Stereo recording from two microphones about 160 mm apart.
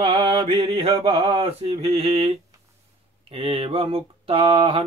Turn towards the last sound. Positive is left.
turn(degrees=-35)  # may be behind; listen again after turning